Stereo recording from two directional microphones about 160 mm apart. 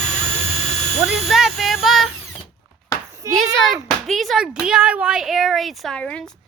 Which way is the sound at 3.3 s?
20° right (ahead or behind).